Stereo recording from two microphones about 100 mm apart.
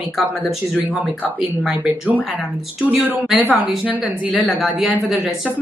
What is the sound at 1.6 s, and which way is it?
Speech, 10° right (ahead or behind).